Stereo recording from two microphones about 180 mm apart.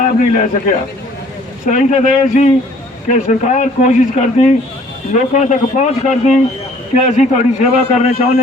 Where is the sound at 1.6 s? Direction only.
45° left (ahead or behind).